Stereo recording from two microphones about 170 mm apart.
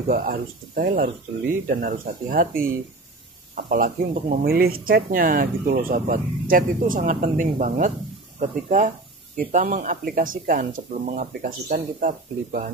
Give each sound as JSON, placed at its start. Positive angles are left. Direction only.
{"t": 0.1, "sound": "speech", "side_deg": -55}